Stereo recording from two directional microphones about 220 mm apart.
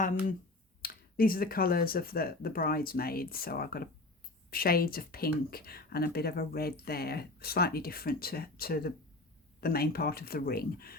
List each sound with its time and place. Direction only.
0.8 s speech: 40° left (ahead or behind)